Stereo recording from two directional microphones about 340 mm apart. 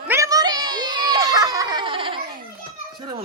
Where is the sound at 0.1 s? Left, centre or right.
Centre.